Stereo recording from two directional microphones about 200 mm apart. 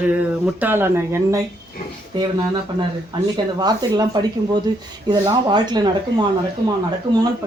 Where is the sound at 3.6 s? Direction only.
20° right (ahead or behind).